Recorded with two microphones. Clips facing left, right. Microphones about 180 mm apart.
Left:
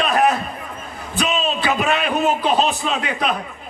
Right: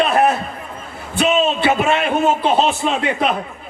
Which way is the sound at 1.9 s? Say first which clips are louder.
Right 3 dB; 20° right (ahead or behind).